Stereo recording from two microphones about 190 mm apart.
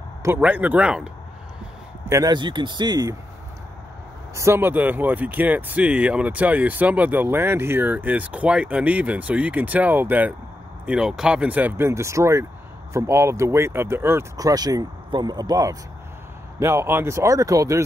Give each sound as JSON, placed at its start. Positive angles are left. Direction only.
{"t": 0.2, "sound": "speech", "side_deg": -10}
{"t": 2.0, "sound": "speech", "side_deg": -20}
{"t": 4.4, "sound": "speech", "side_deg": -10}